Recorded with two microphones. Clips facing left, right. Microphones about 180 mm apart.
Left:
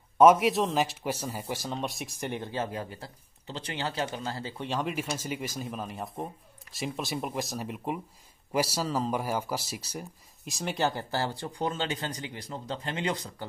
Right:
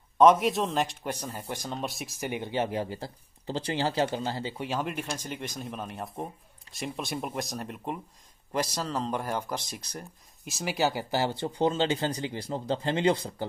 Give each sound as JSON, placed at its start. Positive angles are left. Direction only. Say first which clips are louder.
{"t": 0.2, "sound": "speech", "louder": "left 1 dB", "side_deg": 5}
{"t": 2.5, "sound": "speech", "louder": "right 4 dB", "side_deg": -25}
{"t": 4.4, "sound": "speech", "louder": "right 3 dB", "side_deg": -20}
{"t": 4.6, "sound": "speech", "louder": "left 2 dB", "side_deg": 0}